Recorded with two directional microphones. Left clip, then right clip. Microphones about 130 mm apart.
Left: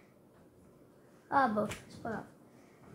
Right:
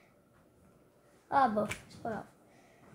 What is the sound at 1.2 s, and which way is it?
Speech, 50° right (ahead or behind).